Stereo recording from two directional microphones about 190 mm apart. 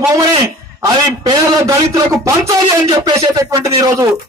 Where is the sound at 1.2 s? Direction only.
20° right (ahead or behind).